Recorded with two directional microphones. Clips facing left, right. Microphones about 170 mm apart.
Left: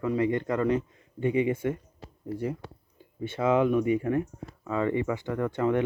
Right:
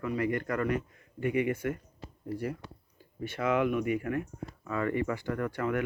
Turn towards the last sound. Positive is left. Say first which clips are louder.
# left 5 dB
turn(degrees=25)  # may be behind; listen again after turning